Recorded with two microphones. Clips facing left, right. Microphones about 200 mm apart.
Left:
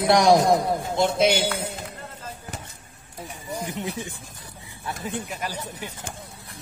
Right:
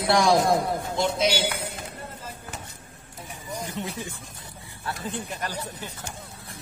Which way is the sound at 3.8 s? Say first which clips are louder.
Left 2 dB; 15° left (ahead or behind).